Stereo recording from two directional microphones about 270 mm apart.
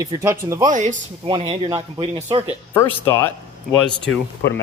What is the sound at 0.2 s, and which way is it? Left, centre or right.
Speech, centre.